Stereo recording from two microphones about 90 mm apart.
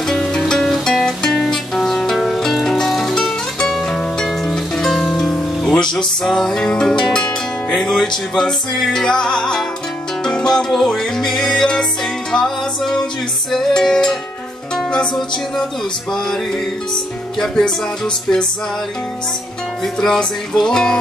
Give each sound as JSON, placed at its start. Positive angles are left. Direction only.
{"t": 0.0, "sound": "music", "side_deg": 5}
{"t": 16.9, "sound": "music", "side_deg": 5}
{"t": 19.8, "sound": "music", "side_deg": 5}